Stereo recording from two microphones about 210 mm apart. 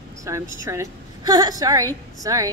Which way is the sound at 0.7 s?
15° right (ahead or behind).